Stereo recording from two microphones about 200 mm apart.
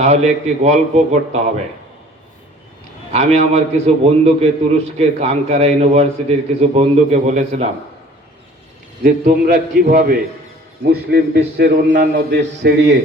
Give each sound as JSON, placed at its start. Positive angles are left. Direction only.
{"t": 0.0, "sound": "a man's voice", "side_deg": -35}
{"t": 3.1, "sound": "a man's voice", "side_deg": -30}
{"t": 9.0, "sound": "a man's voice", "side_deg": -45}